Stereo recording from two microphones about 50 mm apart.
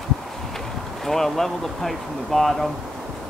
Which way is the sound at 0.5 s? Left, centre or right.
Centre.